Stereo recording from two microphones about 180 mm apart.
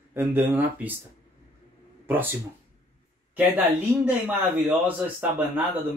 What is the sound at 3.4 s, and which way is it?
Speech, 10° right (ahead or behind).